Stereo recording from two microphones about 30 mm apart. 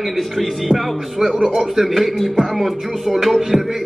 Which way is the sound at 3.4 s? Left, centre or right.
Centre.